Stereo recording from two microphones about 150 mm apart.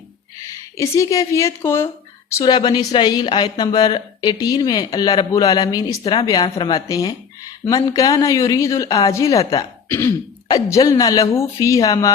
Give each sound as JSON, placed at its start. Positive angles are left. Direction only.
{"t": 0.8, "sound": "speech", "side_deg": 20}
{"t": 2.3, "sound": "speech", "side_deg": 30}